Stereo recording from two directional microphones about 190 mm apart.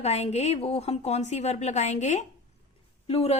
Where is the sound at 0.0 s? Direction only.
35° left (ahead or behind).